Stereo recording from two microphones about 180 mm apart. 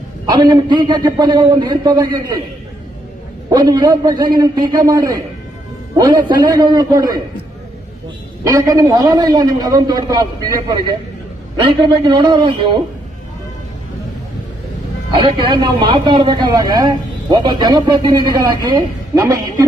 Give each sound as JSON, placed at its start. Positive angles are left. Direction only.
{"t": 0.3, "sound": "a man's voice", "side_deg": -25}
{"t": 3.5, "sound": "a man's voice", "side_deg": -25}
{"t": 8.4, "sound": "a man's voice", "side_deg": -15}
{"t": 11.6, "sound": "a man's voice", "side_deg": -25}
{"t": 15.1, "sound": "a man's voice", "side_deg": -25}